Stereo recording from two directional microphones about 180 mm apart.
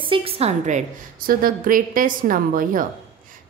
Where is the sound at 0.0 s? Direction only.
30° right (ahead or behind).